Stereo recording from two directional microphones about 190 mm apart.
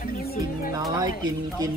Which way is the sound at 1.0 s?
20° right (ahead or behind).